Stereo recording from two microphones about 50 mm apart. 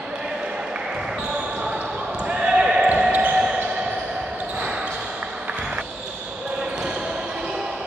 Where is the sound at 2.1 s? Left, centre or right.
Right.